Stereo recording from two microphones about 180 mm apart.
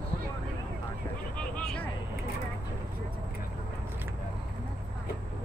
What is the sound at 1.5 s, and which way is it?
Vehicle, 5° left (ahead or behind).